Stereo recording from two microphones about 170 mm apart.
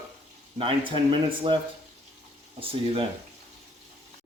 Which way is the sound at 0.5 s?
30° right (ahead or behind).